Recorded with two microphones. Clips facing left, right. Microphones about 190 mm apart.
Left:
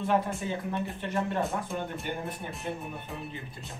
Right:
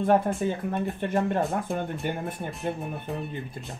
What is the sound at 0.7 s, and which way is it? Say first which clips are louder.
Speech: right 5 dB; 50° right (ahead or behind).